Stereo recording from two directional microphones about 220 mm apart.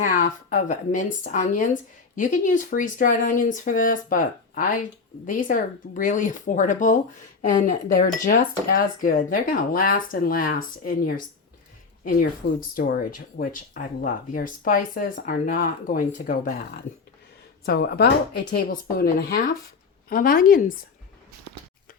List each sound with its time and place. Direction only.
0.0 s speech: 35° left (ahead or behind)
12.5 s speech: 40° left (ahead or behind)
17.7 s speech: 45° left (ahead or behind)